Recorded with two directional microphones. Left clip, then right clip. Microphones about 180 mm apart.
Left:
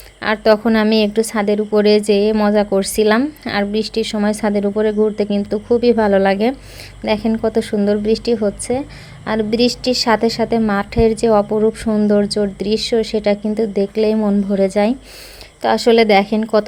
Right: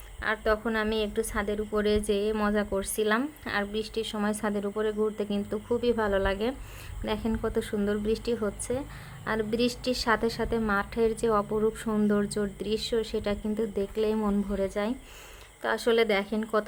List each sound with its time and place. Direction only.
0.2 s a woman's voice: 30° left (ahead or behind)